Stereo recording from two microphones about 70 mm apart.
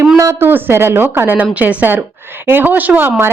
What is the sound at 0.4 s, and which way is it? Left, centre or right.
A woman's voice, right.